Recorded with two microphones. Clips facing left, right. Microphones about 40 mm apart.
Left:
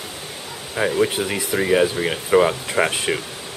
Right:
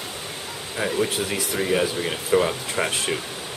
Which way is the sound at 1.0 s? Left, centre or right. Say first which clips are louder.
Left 4 dB; centre.